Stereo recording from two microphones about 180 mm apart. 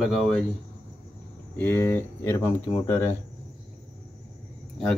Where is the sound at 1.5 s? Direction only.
10° left (ahead or behind).